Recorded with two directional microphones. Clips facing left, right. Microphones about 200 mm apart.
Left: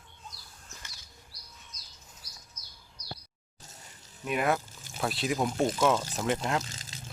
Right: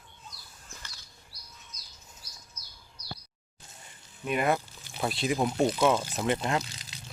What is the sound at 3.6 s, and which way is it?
Music, 40° left (ahead or behind).